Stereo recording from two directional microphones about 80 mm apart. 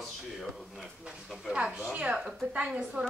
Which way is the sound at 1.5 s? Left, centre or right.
Centre.